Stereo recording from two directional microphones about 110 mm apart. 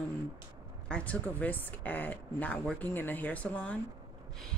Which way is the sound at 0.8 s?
10° left (ahead or behind).